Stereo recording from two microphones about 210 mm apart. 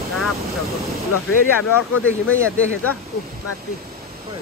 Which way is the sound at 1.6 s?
85° left.